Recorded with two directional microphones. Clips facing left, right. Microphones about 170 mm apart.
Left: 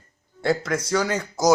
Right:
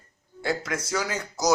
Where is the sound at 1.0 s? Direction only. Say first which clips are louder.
Left 5 dB; 50° left (ahead or behind).